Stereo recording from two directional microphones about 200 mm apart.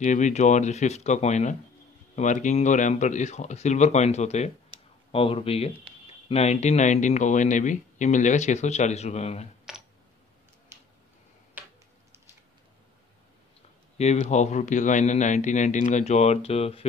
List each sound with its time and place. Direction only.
0.0 s speech: 35° left (ahead or behind)
13.9 s speech: 30° left (ahead or behind)